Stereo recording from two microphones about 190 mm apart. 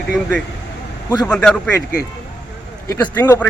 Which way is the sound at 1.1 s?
20° left (ahead or behind).